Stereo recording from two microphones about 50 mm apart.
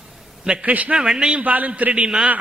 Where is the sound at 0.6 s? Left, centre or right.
Right.